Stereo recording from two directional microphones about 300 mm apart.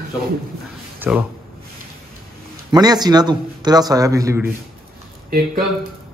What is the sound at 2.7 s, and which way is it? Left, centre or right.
A man's voice, centre.